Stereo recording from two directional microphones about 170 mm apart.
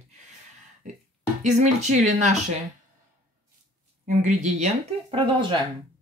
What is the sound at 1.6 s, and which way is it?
Speech, 45° right (ahead or behind).